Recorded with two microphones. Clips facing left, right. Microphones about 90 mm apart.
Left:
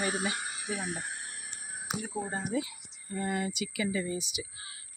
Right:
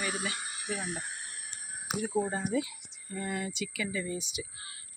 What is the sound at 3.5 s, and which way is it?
Speech, 10° left (ahead or behind).